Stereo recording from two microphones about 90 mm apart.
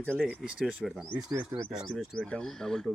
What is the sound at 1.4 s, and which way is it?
Speech, 30° right (ahead or behind).